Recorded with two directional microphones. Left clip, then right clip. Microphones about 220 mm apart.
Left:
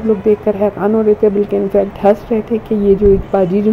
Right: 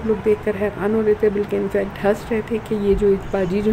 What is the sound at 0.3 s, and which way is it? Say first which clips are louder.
A woman's voice: left 7 dB; 15° left (ahead or behind).